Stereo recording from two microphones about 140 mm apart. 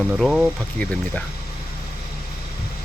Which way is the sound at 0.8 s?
10° left (ahead or behind).